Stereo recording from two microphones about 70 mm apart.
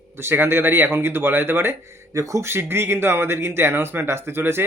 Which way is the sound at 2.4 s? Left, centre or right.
Right.